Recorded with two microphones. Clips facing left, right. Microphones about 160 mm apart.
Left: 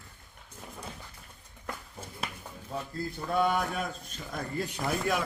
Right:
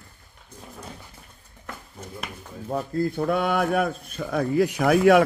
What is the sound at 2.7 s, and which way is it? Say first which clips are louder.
A man's voice: right 11 dB; 55° right (ahead or behind).